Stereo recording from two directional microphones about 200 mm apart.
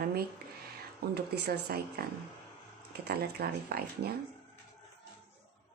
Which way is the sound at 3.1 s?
50° right (ahead or behind).